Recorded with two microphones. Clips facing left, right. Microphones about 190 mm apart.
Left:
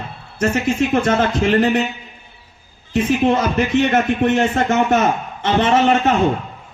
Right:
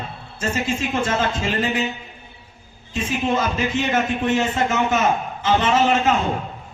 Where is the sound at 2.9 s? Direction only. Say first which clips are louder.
Left 7 dB; 65° left (ahead or behind).